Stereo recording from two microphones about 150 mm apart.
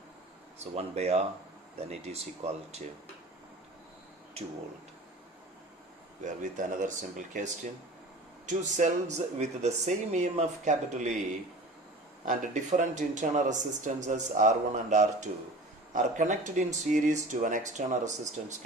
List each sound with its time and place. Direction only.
0.6 s speech: 45° right (ahead or behind)
6.2 s speech: 55° right (ahead or behind)